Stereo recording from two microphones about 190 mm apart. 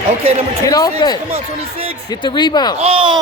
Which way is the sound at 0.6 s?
20° left (ahead or behind).